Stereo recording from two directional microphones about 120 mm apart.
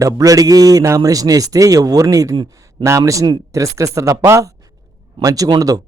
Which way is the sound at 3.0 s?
30° right (ahead or behind).